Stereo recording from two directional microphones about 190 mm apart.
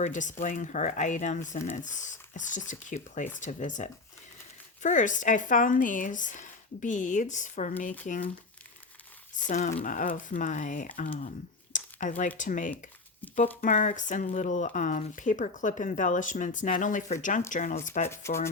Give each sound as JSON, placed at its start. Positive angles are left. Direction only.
{"t": 0.0, "sound": "speech", "side_deg": 40}
{"t": 9.3, "sound": "speech", "side_deg": 40}
{"t": 11.7, "sound": "a sound", "side_deg": 40}
{"t": 12.4, "sound": "speech", "side_deg": 40}
{"t": 18.1, "sound": "speech", "side_deg": 15}